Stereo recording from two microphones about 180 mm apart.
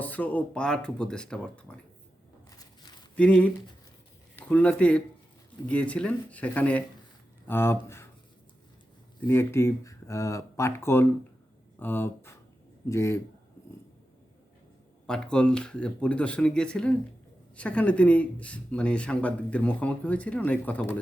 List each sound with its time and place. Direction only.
0.0 s speech: 10° left (ahead or behind)
3.2 s speech: 5° left (ahead or behind)
9.2 s speech: 15° left (ahead or behind)
15.0 s speech: 5° left (ahead or behind)